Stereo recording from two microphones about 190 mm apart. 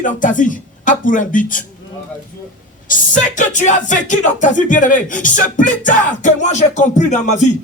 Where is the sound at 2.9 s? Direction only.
40° left (ahead or behind).